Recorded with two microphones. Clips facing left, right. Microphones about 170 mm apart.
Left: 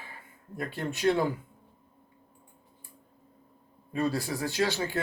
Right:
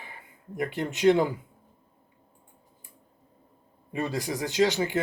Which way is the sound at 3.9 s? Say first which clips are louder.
Left 1 dB; 20° right (ahead or behind).